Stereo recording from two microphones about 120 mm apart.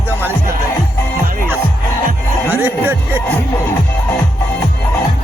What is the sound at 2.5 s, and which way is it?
Music, 15° right (ahead or behind).